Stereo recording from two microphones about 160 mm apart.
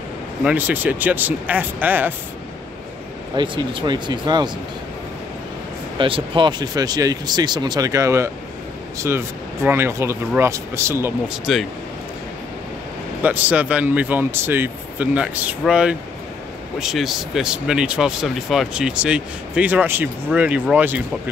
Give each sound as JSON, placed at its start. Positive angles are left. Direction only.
{"t": 0.4, "sound": "speech", "side_deg": -10}
{"t": 3.3, "sound": "speech", "side_deg": -30}
{"t": 5.9, "sound": "speech", "side_deg": -35}
{"t": 11.2, "sound": "speech", "side_deg": 0}
{"t": 13.2, "sound": "speech", "side_deg": -10}